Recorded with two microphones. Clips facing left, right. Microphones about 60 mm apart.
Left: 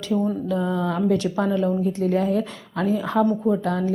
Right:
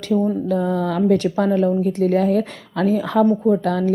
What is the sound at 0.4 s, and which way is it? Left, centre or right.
A woman's voice, right.